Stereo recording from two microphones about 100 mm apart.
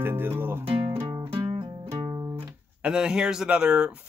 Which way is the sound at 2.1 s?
30° right (ahead or behind).